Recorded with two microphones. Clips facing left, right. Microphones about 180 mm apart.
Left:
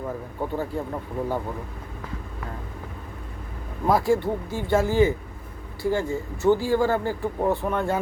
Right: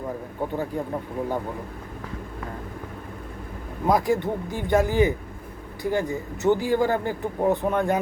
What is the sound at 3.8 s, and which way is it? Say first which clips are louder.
A man's voice: left 1 dB; 20° right (ahead or behind).